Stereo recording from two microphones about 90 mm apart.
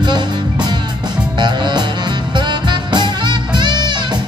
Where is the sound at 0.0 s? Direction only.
55° right (ahead or behind).